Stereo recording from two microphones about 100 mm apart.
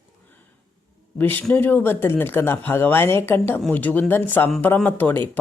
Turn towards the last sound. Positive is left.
turn(degrees=20)  # may be behind; listen again after turning